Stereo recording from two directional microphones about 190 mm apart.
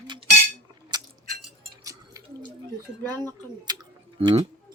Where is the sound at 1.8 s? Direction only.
20° right (ahead or behind).